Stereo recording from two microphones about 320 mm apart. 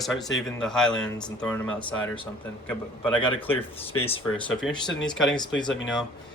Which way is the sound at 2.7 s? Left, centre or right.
Centre.